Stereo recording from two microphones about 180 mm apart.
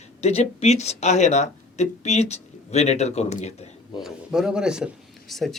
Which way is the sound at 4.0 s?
5° right (ahead or behind).